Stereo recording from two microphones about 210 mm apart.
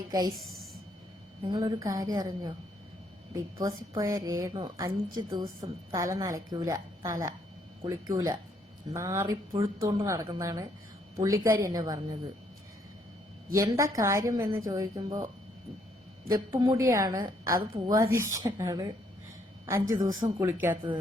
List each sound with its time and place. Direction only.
0.1 s a woman's voice: 15° right (ahead or behind)
0.3 s a sound: centre (ahead or behind)
1.5 s a woman's voice: 20° right (ahead or behind)
13.5 s a woman's voice: 15° right (ahead or behind)
16.3 s a woman's voice: 20° right (ahead or behind)
20.1 s a woman's voice: 15° right (ahead or behind)